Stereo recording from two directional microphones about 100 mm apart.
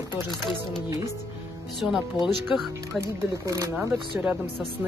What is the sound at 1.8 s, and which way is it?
Speech, centre (ahead or behind).